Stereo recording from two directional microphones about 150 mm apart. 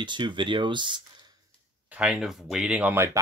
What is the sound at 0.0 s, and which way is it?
Speech, 30° right (ahead or behind).